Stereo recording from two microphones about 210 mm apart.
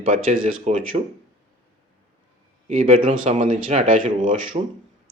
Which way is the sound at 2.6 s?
35° right (ahead or behind).